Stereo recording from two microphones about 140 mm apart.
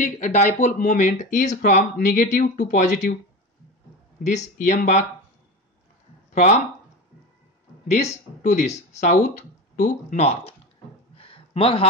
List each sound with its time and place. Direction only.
0.0 s speech: 60° left (ahead or behind)
4.2 s speech: 55° left (ahead or behind)
6.3 s speech: 55° left (ahead or behind)
7.9 s speech: 55° left (ahead or behind)
11.1 s a sound: 40° left (ahead or behind)